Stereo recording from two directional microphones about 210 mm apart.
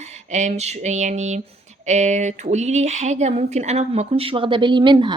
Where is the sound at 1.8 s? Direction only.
35° right (ahead or behind).